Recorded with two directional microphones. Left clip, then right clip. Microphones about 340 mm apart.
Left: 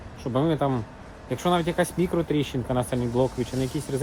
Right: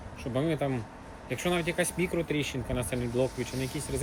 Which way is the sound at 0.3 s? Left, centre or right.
Centre.